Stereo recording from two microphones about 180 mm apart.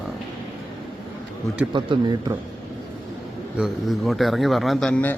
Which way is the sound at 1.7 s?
25° right (ahead or behind).